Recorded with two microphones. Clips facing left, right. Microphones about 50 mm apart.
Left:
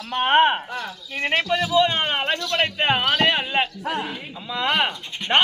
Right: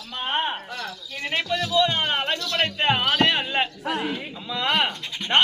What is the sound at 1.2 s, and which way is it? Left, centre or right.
Speech, left.